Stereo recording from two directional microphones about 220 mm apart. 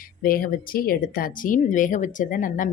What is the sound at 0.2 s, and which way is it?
Speech, 40° left (ahead or behind).